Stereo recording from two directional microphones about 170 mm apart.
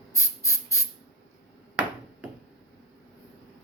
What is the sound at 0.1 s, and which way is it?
Hiss, 20° left (ahead or behind).